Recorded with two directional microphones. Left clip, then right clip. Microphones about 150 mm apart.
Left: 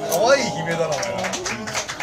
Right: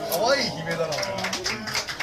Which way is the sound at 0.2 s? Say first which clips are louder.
Left 6 dB; 5° left (ahead or behind).